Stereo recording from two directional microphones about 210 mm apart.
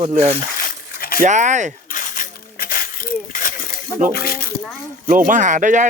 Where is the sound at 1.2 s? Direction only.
35° right (ahead or behind).